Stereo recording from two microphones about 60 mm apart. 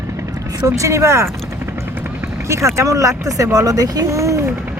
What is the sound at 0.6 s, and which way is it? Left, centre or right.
Speech, right.